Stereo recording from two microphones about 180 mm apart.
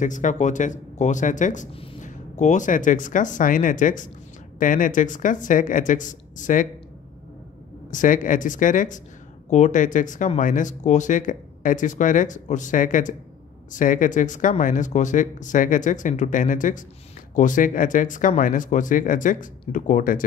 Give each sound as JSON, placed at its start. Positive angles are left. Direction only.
{"t": 0.0, "sound": "speech", "side_deg": 45}
{"t": 1.7, "sound": "speech", "side_deg": 30}
{"t": 2.0, "sound": "speech", "side_deg": 40}
{"t": 7.9, "sound": "speech", "side_deg": 45}